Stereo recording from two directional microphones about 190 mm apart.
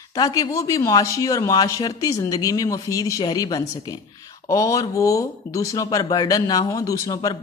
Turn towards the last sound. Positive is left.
turn(degrees=20)  # may be behind; listen again after turning